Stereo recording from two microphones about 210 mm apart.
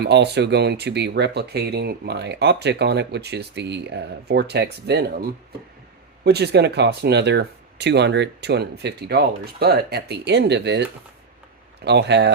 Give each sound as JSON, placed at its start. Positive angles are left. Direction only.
{"t": 0.0, "sound": "speech", "side_deg": -50}
{"t": 11.9, "sound": "speech", "side_deg": -55}